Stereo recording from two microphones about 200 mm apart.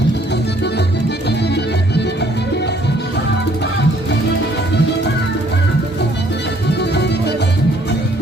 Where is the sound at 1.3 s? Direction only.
55° left (ahead or behind).